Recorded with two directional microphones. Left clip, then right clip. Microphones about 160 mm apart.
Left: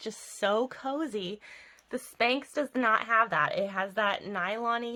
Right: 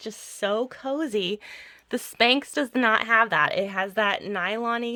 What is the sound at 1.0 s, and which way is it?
Speech, 45° right (ahead or behind).